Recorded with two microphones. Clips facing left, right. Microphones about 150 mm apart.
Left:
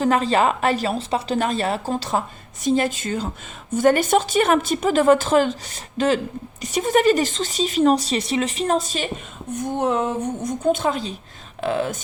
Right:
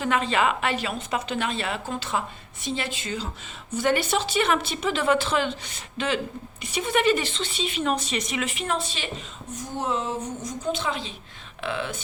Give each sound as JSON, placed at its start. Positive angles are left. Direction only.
{"t": 0.0, "sound": "a woman's voice", "side_deg": 35}
{"t": 9.6, "sound": "a woman's voice", "side_deg": 60}